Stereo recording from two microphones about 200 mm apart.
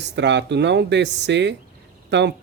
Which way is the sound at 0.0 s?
60° right (ahead or behind).